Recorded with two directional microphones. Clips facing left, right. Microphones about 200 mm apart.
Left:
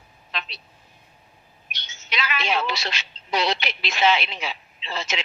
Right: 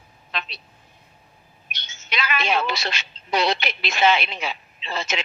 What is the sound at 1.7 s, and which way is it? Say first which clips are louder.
A woman's voice: right 1 dB; 55° right (ahead or behind).